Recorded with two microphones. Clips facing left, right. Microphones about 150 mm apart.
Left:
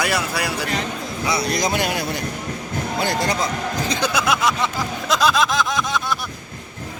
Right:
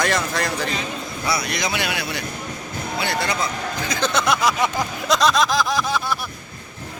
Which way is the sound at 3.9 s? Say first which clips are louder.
Right 2 dB; 10° left (ahead or behind).